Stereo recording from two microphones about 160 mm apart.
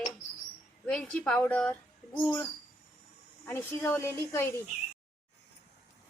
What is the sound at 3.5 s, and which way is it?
A woman's voice, 15° left (ahead or behind).